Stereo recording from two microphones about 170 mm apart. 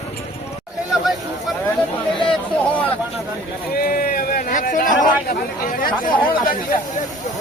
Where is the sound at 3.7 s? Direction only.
60° left (ahead or behind).